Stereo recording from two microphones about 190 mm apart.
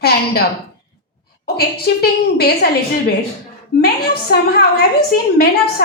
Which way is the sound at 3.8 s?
55° left (ahead or behind).